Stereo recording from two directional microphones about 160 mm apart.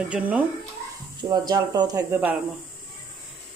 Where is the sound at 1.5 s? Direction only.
25° right (ahead or behind).